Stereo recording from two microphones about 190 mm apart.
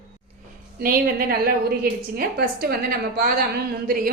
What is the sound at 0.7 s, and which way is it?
A woman's voice, 55° right (ahead or behind).